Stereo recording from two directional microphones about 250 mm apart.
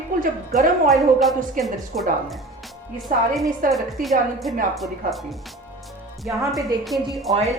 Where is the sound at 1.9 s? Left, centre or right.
Right.